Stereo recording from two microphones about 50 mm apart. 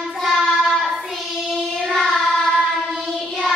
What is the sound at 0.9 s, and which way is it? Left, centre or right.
Child singing, centre.